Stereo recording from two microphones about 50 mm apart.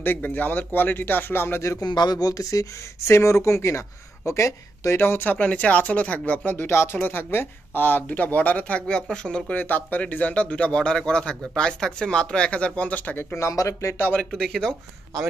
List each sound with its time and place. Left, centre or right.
0.0 s speech: left
3.1 s speech: left
4.9 s speech: left
5.2 s speech: left
6.4 s speech: left; by 9.4 s centre
9.5 s speech: left
13.2 s speech: left
14.3 s speech: centre